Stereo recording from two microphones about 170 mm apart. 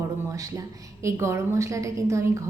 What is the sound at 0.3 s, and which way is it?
A woman's voice, 20° right (ahead or behind).